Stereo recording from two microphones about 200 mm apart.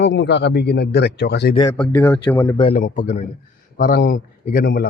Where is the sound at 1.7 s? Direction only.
5° left (ahead or behind).